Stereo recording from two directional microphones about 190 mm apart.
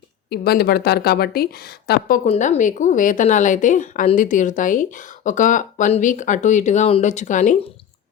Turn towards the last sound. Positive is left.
turn(degrees=40)  # may be behind; listen again after turning